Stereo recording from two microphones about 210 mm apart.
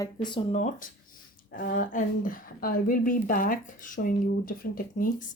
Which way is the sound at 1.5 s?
40° left (ahead or behind).